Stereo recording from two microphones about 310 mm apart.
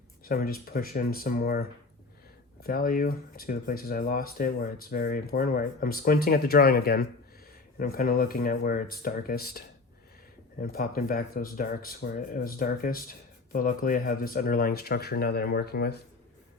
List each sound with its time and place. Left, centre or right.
0.3 s speech: left